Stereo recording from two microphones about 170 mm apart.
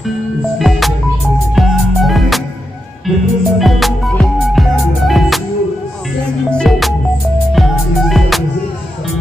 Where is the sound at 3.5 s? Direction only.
Centre (ahead or behind).